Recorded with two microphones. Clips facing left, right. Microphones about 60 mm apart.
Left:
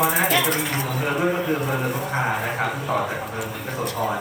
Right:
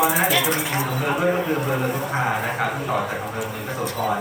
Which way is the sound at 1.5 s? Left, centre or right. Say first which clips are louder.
Right 1 dB; centre.